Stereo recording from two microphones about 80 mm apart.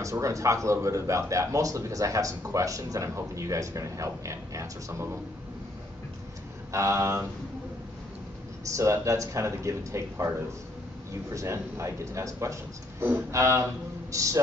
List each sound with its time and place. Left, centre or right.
0.0 s a man's voice: right
6.7 s a man's voice: right
8.6 s a man's voice: right
11.3 s a man's voice: right